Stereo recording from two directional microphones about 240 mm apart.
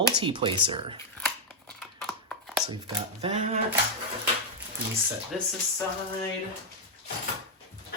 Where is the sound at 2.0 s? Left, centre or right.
Centre.